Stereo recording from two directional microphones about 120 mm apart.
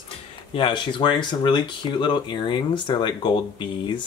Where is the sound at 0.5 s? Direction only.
45° left (ahead or behind).